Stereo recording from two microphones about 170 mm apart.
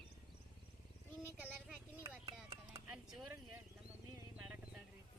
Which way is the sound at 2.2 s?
20° right (ahead or behind).